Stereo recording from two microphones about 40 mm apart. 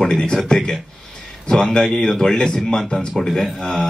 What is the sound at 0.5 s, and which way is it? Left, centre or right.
Speech, left.